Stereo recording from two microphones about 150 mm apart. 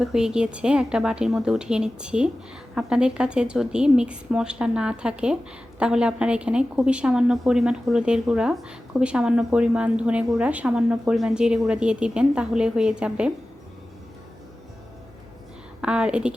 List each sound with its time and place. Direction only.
0.0 s a woman's voice: 5° right (ahead or behind)
15.8 s a woman's voice: 5° right (ahead or behind)